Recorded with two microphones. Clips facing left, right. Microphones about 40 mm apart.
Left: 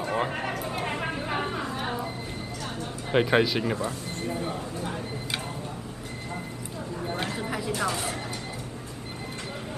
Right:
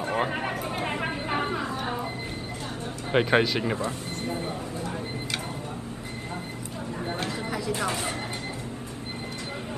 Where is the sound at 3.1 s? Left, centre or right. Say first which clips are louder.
Even; centre.